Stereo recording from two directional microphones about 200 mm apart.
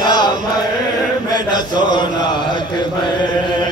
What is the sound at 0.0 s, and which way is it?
Chant, 20° left (ahead or behind).